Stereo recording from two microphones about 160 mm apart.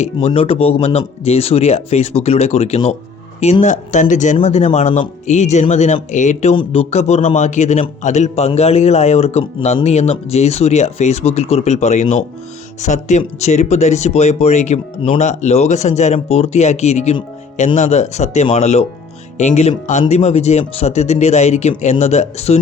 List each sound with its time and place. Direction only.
0.0 s a man's voice: 40° left (ahead or behind)